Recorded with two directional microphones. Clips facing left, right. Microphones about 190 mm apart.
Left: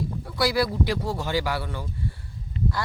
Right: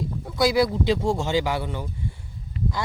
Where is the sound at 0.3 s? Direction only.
20° right (ahead or behind).